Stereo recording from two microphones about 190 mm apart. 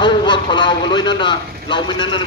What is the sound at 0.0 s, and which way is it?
A man's voice, 25° left (ahead or behind).